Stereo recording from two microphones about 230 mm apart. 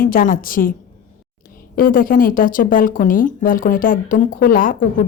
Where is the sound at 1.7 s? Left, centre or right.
Left.